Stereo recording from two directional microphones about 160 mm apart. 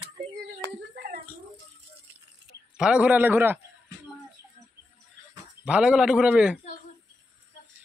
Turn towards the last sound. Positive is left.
turn(degrees=-5)  # may be behind; listen again after turning